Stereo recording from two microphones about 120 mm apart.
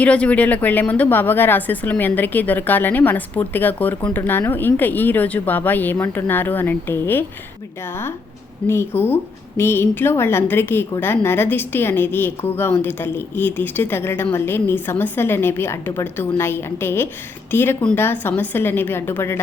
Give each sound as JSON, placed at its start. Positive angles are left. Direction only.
{"t": 0.0, "sound": "a woman's voice", "side_deg": 10}
{"t": 8.6, "sound": "a woman's voice", "side_deg": 20}